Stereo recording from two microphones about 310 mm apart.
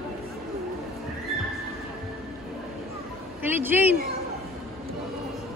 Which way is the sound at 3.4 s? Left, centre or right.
Centre.